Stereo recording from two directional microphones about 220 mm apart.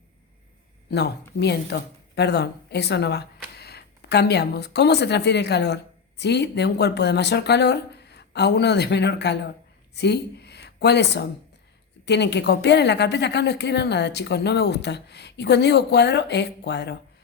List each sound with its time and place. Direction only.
0.9 s a woman's voice: 50° left (ahead or behind)